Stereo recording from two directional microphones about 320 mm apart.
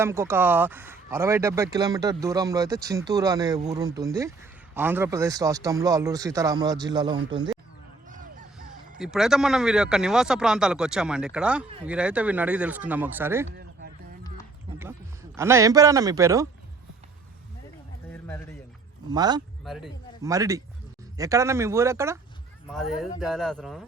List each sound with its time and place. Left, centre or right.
0.0 s speech: centre
8.1 s a sound: right
9.0 s speech: centre
14.8 s a man's voice: centre
18.1 s a sound: centre
19.1 s speech: centre
19.6 s speech: centre